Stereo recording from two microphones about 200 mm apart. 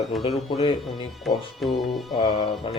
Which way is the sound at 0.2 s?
30° left (ahead or behind).